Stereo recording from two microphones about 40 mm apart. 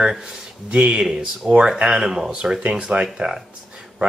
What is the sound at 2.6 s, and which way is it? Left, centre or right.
Speech, right.